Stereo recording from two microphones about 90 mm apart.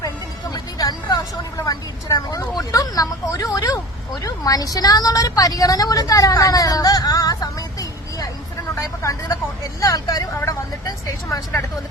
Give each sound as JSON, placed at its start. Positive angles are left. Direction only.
{"t": 0.5, "sound": "vehicle", "side_deg": 45}
{"t": 8.7, "sound": "vehicle", "side_deg": 35}
{"t": 9.8, "sound": "speech", "side_deg": 40}